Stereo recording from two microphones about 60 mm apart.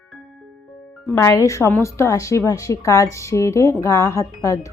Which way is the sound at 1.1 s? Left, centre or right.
Left.